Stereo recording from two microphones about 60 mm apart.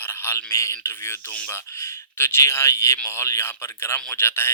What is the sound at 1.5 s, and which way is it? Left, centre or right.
Speech, left.